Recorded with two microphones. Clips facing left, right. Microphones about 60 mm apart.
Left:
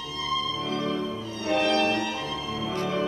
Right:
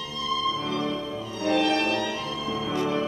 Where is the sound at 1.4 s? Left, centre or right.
Left.